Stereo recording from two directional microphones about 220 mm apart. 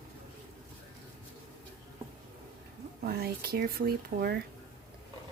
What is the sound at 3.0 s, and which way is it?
A woman's voice, 45° right (ahead or behind).